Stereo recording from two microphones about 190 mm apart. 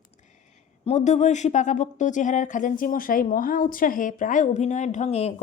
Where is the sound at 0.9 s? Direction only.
35° left (ahead or behind).